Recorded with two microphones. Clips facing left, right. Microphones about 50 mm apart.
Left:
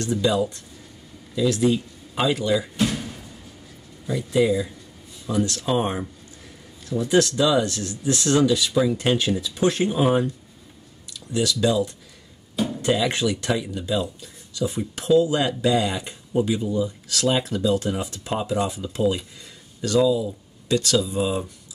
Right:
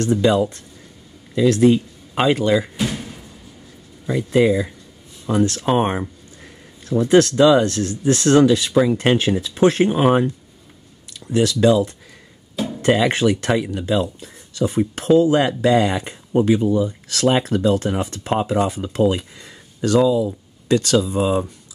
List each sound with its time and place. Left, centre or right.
0.0 s speech: right
2.8 s a sound: centre
4.1 s speech: right
16.6 s speech: right